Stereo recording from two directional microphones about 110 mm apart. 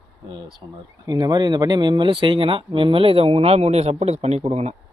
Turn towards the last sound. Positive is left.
turn(degrees=-80)